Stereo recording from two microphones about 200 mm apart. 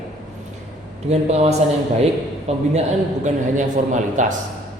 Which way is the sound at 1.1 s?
30° right (ahead or behind).